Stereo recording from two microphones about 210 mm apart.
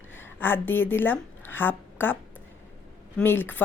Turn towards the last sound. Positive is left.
turn(degrees=10)  # may be behind; listen again after turning